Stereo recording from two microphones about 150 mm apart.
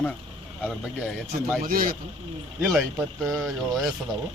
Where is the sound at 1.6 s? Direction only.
70° right (ahead or behind).